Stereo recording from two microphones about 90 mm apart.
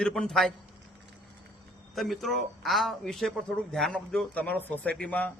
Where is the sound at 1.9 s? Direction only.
Centre (ahead or behind).